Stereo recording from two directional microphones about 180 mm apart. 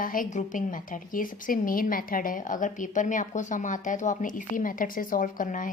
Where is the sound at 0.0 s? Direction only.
50° left (ahead or behind).